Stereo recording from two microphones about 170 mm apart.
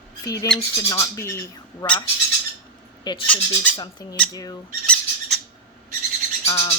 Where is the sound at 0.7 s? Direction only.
20° left (ahead or behind).